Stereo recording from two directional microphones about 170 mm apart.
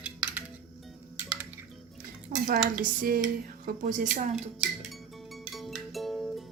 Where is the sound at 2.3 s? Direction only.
60° right (ahead or behind).